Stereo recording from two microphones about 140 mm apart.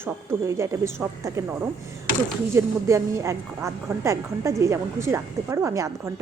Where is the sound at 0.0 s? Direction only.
20° right (ahead or behind).